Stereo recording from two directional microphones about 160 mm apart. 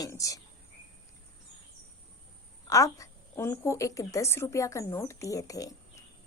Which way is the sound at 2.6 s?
20° left (ahead or behind).